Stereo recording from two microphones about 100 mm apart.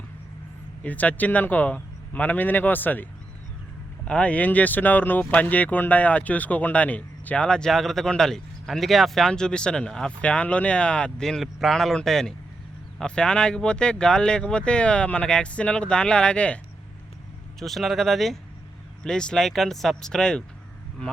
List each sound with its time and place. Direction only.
0.9 s speech: 15° left (ahead or behind)
17.6 s speech: centre (ahead or behind)